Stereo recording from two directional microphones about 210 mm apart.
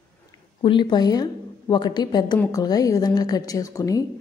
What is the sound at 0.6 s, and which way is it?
A woman's voice, 20° left (ahead or behind).